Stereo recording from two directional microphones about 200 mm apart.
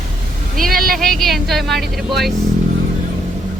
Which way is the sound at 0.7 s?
45° right (ahead or behind).